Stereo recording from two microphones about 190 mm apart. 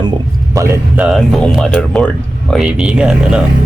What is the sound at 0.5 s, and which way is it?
Speech, 15° right (ahead or behind).